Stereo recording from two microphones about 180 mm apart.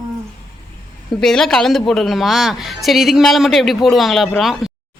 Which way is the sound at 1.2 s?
5° left (ahead or behind).